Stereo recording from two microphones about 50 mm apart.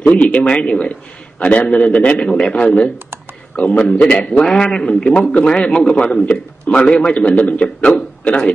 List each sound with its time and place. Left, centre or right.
0.1 s a man's voice: left
4.1 s a man's voice: left
5.2 s a man's voice: left
6.7 s a sound: left
7.1 s a man's voice: left